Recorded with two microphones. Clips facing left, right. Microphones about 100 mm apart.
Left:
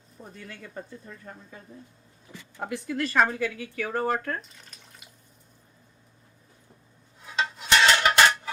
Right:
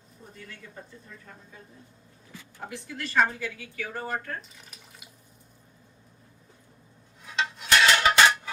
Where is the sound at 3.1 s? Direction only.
75° left (ahead or behind).